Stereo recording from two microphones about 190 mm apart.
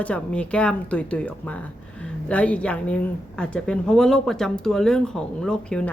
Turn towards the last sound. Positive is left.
turn(degrees=5)  # may be behind; listen again after turning